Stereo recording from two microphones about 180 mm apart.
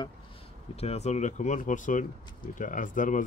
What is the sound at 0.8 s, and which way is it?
Speech, 35° left (ahead or behind).